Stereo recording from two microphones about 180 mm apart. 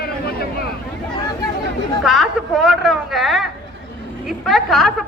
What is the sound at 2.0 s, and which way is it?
A woman's voice, centre (ahead or behind).